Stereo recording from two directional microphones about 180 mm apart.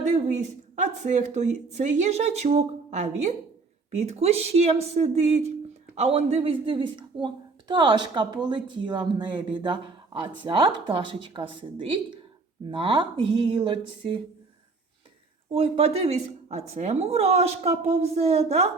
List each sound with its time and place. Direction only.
0.8 s a woman's voice: 40° right (ahead or behind)
15.5 s a woman's voice: 30° right (ahead or behind)